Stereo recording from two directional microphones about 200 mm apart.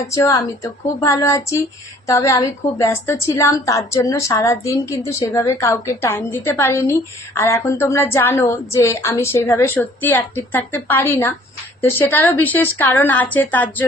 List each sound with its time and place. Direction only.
0.1 s a woman's voice: 15° left (ahead or behind)